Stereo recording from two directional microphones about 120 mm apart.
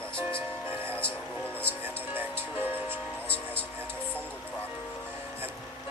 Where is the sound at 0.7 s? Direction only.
20° right (ahead or behind).